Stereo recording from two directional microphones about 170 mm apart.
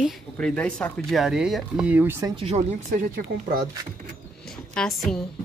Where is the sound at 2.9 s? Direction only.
55° right (ahead or behind).